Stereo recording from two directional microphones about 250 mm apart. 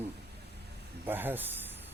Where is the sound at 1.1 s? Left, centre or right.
Centre.